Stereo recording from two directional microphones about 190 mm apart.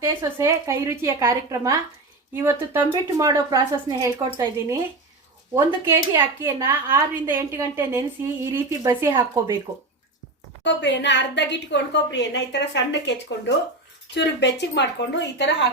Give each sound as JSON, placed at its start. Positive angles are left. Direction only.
{"t": 0.0, "sound": "a woman's voice", "side_deg": -15}
{"t": 10.6, "sound": "a woman's voice", "side_deg": 65}